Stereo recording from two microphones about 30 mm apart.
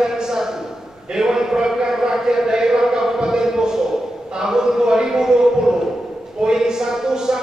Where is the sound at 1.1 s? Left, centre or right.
Right.